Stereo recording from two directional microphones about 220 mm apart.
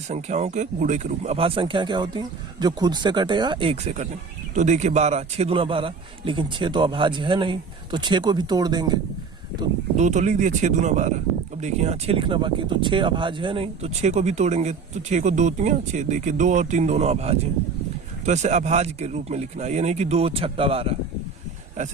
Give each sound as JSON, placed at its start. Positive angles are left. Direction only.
{"t": 0.1, "sound": "a man's voice", "side_deg": -30}
{"t": 10.0, "sound": "a man's voice", "side_deg": -30}